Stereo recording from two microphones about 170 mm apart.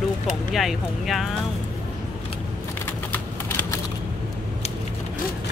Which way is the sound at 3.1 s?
10° left (ahead or behind).